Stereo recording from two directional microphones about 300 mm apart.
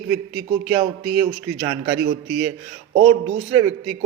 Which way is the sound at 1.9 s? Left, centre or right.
Right.